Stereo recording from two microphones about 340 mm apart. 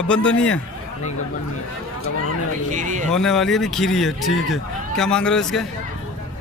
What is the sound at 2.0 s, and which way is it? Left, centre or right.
Speech, left.